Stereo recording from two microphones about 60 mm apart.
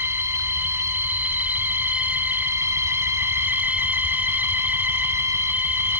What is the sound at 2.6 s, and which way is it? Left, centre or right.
Music, right.